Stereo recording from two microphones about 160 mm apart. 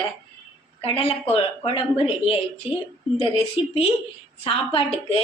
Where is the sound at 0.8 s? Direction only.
35° left (ahead or behind).